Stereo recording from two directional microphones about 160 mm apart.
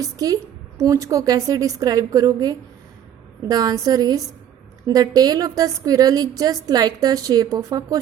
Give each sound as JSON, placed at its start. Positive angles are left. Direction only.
{"t": 0.0, "sound": "a woman's voice", "side_deg": -20}